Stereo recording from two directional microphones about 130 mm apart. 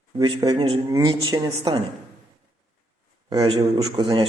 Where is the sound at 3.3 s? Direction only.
40° right (ahead or behind).